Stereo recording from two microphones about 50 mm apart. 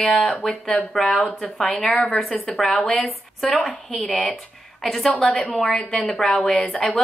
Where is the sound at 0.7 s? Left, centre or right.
Centre.